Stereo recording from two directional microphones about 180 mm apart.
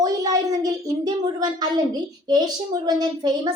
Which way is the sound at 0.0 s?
20° right (ahead or behind).